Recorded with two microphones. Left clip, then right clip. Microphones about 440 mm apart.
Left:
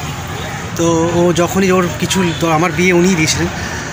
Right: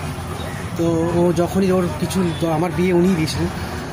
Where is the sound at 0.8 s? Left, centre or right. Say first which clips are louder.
Left 5 dB; right.